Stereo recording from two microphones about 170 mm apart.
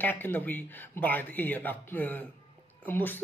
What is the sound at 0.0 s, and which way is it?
Speech, 10° left (ahead or behind).